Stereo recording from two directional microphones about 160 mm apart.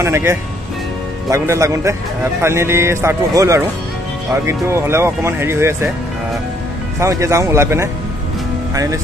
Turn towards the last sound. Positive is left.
turn(degrees=-15)  # may be behind; listen again after turning